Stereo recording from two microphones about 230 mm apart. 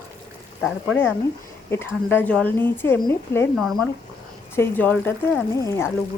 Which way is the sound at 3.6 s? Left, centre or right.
Centre.